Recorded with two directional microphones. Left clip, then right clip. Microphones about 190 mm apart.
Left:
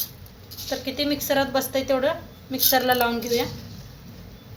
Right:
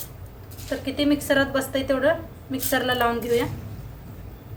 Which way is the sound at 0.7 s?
15° left (ahead or behind).